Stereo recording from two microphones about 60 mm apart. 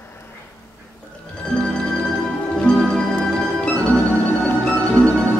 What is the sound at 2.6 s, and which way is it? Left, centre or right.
Music, centre.